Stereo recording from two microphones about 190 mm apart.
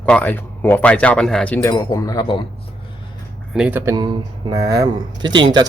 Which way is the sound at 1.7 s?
20° left (ahead or behind).